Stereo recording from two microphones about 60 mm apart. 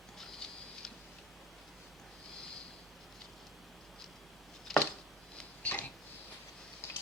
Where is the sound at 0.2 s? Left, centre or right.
Centre.